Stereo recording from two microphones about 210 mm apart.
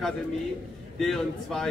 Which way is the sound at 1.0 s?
Centre (ahead or behind).